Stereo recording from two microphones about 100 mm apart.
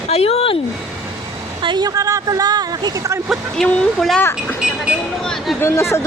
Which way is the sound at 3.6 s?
5° left (ahead or behind).